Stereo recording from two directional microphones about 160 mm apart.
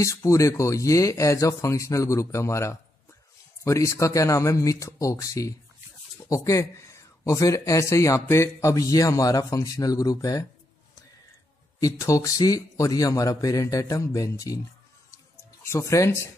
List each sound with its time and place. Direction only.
0.0 s speech: 20° left (ahead or behind)
11.8 s speech: 20° left (ahead or behind)
15.6 s speech: 20° left (ahead or behind)